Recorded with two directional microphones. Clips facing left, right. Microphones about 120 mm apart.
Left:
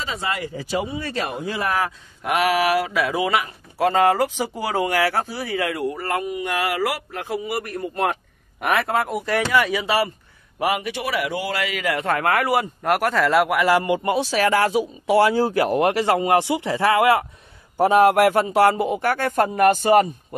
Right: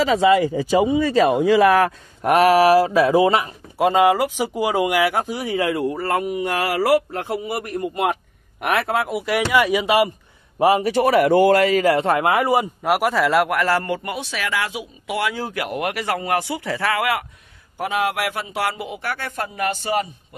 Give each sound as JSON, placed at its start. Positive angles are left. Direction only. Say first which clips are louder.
{"t": 1.3, "sound": "speech", "louder": "right 10 dB", "side_deg": -90}
{"t": 1.9, "sound": "a man's voice", "louder": "right 6 dB", "side_deg": -40}
{"t": 3.7, "sound": "speech", "louder": "right 2 dB", "side_deg": -15}
{"t": 7.9, "sound": "speech", "louder": "left 1 dB", "side_deg": -10}
{"t": 10.6, "sound": "a man's voice", "louder": "right 7 dB", "side_deg": -35}
{"t": 12.8, "sound": "speech", "louder": "right 1 dB", "side_deg": -5}
{"t": 13.7, "sound": "speech", "louder": "left 3 dB", "side_deg": 15}
{"t": 14.0, "sound": "speech", "louder": "left 7 dB", "side_deg": 35}
{"t": 17.7, "sound": "a man's voice", "louder": "left 8 dB", "side_deg": 40}